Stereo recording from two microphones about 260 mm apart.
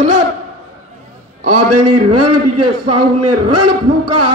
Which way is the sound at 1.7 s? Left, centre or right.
Right.